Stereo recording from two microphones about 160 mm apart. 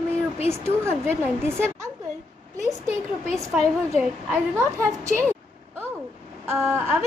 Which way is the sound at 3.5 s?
5° right (ahead or behind).